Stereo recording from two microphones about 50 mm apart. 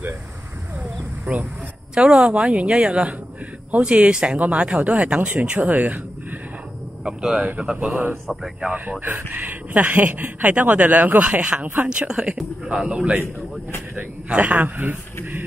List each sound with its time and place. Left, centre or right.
1.2 s speech: right
7.1 s speech: centre
7.7 s speech: right
8.3 s a man's voice: centre
9.0 s speech: right
11.6 s speech: right; by 13.2 s centre
13.2 s speech: left
13.9 s speech: right
14.6 s speech: right